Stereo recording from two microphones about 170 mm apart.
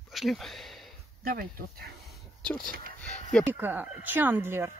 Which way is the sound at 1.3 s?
60° right (ahead or behind).